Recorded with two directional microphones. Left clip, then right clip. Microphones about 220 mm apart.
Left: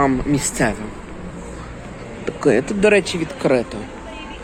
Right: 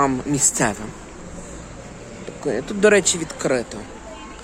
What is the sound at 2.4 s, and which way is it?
Speech, 10° left (ahead or behind).